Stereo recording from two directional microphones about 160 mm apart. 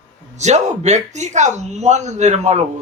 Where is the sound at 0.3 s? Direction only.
45° right (ahead or behind).